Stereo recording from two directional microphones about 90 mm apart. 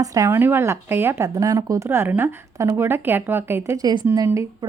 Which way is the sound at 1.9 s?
25° right (ahead or behind).